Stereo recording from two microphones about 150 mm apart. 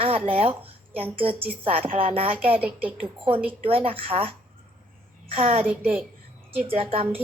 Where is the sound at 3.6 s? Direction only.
40° right (ahead or behind).